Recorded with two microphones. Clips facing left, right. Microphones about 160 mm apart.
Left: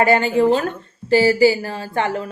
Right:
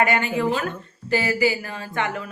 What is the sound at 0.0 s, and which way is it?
Speech, 30° left (ahead or behind).